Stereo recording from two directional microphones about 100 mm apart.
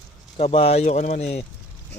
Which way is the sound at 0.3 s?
85° left.